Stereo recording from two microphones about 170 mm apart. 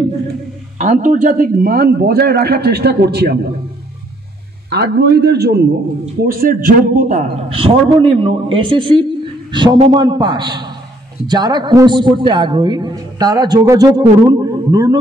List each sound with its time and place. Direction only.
0.7 s a man's voice: 45° right (ahead or behind); by 3.3 s 70° right (ahead or behind)
4.6 s a man's voice: 70° right (ahead or behind)
6.2 s a man's voice: 55° right (ahead or behind); by 15.0 s 20° right (ahead or behind)